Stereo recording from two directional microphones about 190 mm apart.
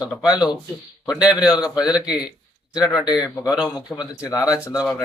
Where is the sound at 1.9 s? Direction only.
5° right (ahead or behind).